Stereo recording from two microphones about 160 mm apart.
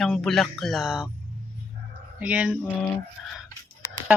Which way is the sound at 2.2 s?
10° right (ahead or behind).